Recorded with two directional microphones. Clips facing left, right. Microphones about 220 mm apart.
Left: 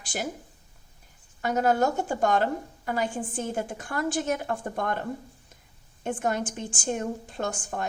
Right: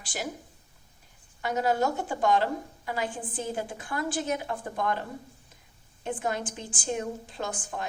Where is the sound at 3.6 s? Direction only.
45° left (ahead or behind).